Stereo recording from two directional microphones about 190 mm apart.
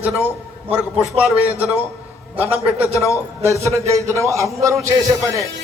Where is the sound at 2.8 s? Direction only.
15° left (ahead or behind).